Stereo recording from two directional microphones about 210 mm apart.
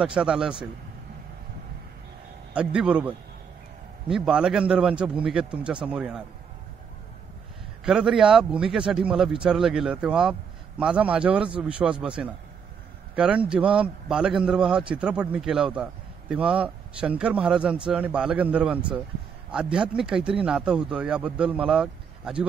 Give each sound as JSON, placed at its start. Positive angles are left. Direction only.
{"t": 0.0, "sound": "a man's voice", "side_deg": -5}
{"t": 2.5, "sound": "a man's voice", "side_deg": -5}
{"t": 7.8, "sound": "a man's voice", "side_deg": -5}